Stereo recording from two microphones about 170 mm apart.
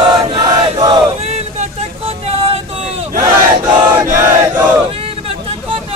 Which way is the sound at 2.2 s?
35° right (ahead or behind).